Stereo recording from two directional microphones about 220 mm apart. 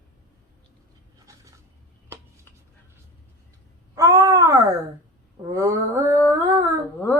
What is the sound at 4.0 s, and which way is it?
Wail, 15° right (ahead or behind).